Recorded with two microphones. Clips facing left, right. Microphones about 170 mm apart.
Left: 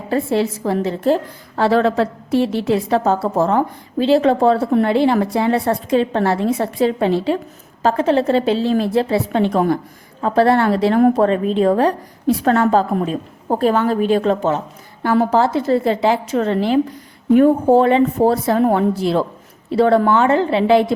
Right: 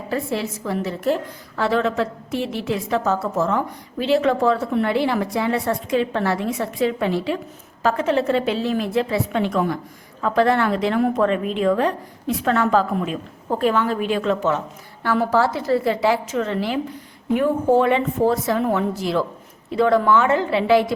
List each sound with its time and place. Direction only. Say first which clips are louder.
0.1 s a woman's voice: left 7 dB; 30° left (ahead or behind)